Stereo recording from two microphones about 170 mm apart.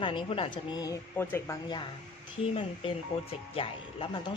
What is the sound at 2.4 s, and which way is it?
A woman's voice, 35° left (ahead or behind).